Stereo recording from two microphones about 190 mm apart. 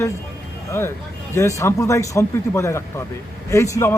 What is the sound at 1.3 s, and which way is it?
Speech, 15° left (ahead or behind).